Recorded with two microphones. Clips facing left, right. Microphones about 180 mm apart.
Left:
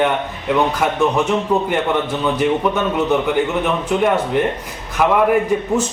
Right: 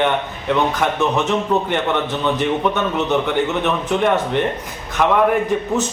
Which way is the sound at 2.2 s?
5° left (ahead or behind).